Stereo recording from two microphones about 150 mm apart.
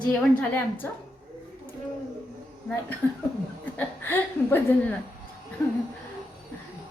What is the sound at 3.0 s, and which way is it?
A woman's voice, 15° left (ahead or behind).